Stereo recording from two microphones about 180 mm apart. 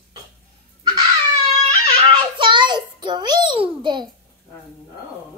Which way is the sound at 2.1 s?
25° right (ahead or behind).